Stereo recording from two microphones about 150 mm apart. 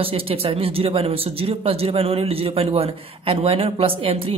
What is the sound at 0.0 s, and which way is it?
Speech, 40° right (ahead or behind).